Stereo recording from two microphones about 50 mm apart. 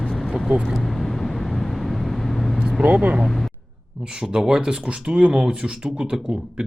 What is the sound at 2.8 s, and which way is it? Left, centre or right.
Speech, right.